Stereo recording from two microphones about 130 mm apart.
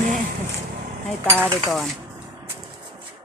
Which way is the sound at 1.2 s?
10° left (ahead or behind).